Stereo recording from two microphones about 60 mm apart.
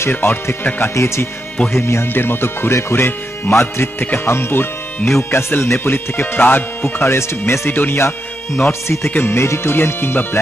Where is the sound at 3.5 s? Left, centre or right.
Left.